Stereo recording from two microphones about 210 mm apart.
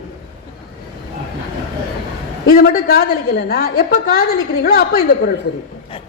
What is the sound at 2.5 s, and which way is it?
A woman's voice, 45° left (ahead or behind).